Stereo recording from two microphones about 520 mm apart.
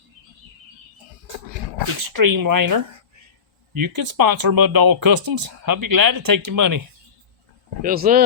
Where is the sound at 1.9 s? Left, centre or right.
Right.